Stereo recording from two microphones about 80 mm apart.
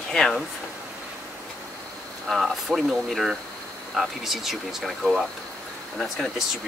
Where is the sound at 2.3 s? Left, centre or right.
Centre.